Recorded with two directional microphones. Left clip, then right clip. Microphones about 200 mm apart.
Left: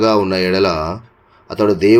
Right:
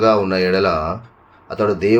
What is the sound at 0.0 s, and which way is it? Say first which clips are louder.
Speech: left 1 dB; 40° left (ahead or behind).